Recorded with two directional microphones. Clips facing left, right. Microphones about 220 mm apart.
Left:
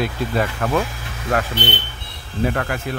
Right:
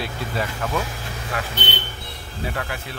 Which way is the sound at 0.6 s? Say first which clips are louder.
Left 5 dB; 55° left (ahead or behind).